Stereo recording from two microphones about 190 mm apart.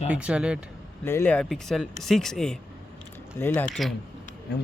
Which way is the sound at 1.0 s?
10° left (ahead or behind).